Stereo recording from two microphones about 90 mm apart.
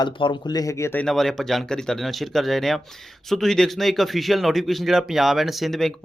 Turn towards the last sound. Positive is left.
turn(degrees=0)  # may be behind; listen again after turning